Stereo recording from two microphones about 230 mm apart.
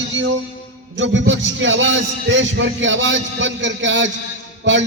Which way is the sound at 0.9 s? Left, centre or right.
Right.